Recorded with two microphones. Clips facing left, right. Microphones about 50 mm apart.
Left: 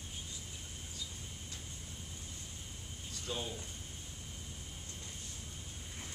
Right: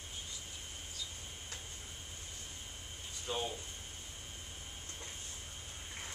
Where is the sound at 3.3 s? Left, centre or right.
Right.